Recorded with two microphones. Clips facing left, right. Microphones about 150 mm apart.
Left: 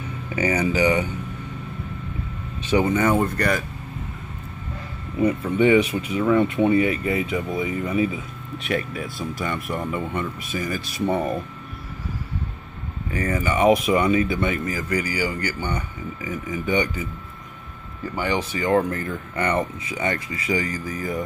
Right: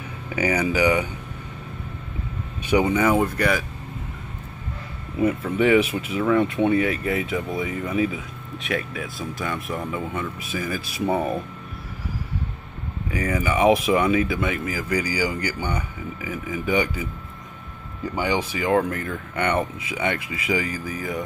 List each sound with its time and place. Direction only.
0.4 s speech: 10° right (ahead or behind)
2.6 s speech: 15° right (ahead or behind)
5.2 s speech: centre (ahead or behind)
13.1 s speech: 10° right (ahead or behind)
18.1 s speech: 10° right (ahead or behind)